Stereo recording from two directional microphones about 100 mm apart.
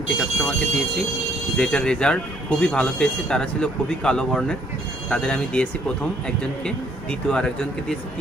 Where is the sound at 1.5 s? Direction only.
10° left (ahead or behind).